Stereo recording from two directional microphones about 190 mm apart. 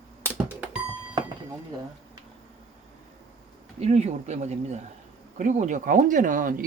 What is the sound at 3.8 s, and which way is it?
Speech, 35° right (ahead or behind).